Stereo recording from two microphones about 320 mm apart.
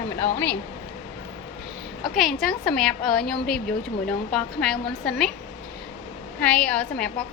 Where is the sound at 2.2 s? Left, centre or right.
Centre.